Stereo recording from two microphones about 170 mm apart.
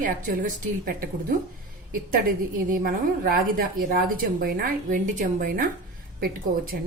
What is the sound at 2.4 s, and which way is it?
A woman's voice, 60° right (ahead or behind).